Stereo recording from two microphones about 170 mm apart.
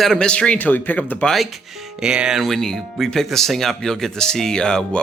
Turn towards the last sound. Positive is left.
turn(degrees=5)  # may be behind; listen again after turning